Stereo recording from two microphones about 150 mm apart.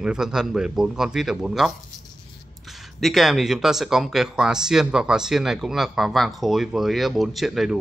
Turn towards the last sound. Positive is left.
turn(degrees=0)  # may be behind; listen again after turning